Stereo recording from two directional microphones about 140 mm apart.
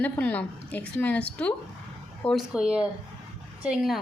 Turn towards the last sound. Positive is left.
turn(degrees=0)  # may be behind; listen again after turning